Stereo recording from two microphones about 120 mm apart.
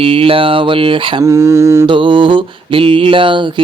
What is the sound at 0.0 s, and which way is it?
Mantra, 50° right (ahead or behind).